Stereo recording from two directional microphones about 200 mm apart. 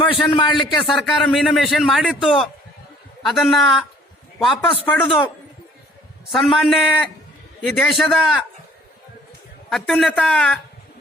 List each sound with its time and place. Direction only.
0.0 s a man's voice: 25° left (ahead or behind)
0.5 s a man's voice: centre (ahead or behind)
6.3 s a man's voice: centre (ahead or behind)
9.6 s a man's voice: centre (ahead or behind)